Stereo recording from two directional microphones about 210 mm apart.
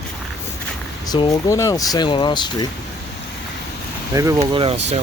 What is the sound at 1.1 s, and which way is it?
Speech, 20° left (ahead or behind).